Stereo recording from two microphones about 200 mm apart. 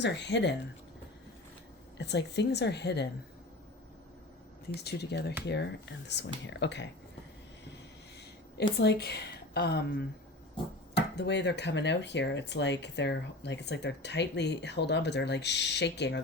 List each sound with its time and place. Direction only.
0.0 s speech: 60° left (ahead or behind)
2.0 s speech: 60° left (ahead or behind)
4.7 s speech: 55° left (ahead or behind)
8.8 s speech: 55° left (ahead or behind)